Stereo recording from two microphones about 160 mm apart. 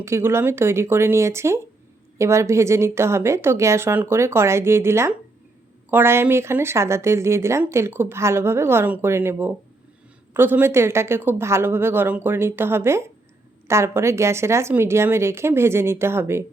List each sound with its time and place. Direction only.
0.0 s speech: 15° right (ahead or behind)